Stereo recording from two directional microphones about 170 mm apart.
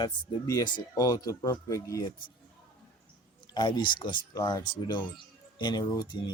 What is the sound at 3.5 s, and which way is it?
Speech, 25° left (ahead or behind).